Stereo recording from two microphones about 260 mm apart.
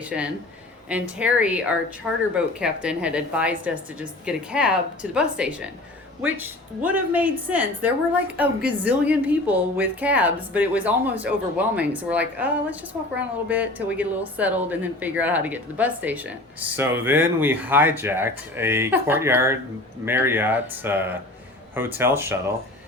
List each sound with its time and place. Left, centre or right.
0.1 s a woman's voice: centre